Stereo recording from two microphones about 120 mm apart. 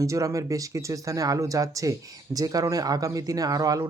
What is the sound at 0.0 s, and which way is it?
Speech, 25° right (ahead or behind).